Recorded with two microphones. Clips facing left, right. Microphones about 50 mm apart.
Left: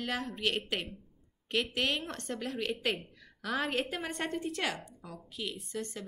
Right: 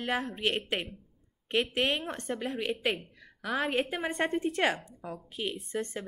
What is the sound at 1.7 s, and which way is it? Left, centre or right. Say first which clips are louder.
A woman's voice: right 3 dB; right.